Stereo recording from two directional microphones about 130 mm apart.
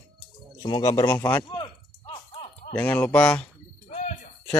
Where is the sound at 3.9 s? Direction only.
70° left (ahead or behind).